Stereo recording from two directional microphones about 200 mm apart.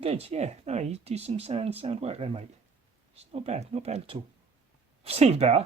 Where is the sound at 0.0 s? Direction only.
30° right (ahead or behind).